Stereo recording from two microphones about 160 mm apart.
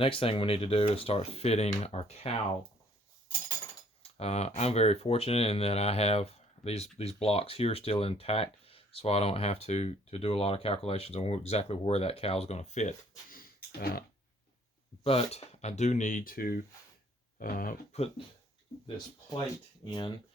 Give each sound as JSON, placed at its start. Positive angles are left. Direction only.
{"t": 0.0, "sound": "speech", "side_deg": 35}
{"t": 4.0, "sound": "speech", "side_deg": 40}
{"t": 13.3, "sound": "a sound", "side_deg": 70}
{"t": 15.0, "sound": "speech", "side_deg": 40}
{"t": 17.3, "sound": "a sound", "side_deg": 65}
{"t": 19.8, "sound": "speech", "side_deg": 30}